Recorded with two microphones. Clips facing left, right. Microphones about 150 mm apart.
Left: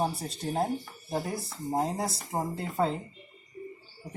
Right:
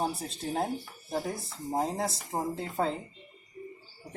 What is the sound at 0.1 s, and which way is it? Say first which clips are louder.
Speech: left 1 dB; centre (ahead or behind).